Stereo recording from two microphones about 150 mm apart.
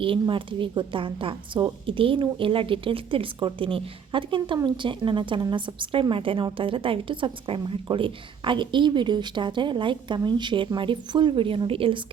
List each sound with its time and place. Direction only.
0.0 s a woman's voice: 35° right (ahead or behind)